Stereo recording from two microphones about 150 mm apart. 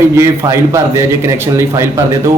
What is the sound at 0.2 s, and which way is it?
A man's voice, 20° right (ahead or behind).